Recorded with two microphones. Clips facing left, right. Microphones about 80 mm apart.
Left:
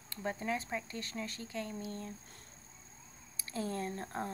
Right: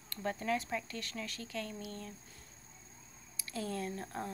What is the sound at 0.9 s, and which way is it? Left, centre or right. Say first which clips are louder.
Speech: left 1 dB; left.